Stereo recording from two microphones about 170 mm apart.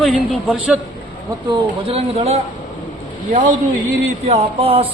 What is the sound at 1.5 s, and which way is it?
Speech, 35° right (ahead or behind).